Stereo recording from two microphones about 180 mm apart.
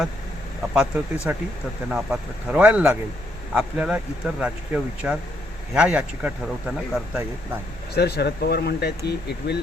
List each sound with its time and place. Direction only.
0.7 s speech: 5° right (ahead or behind)
7.9 s speech: 65° left (ahead or behind)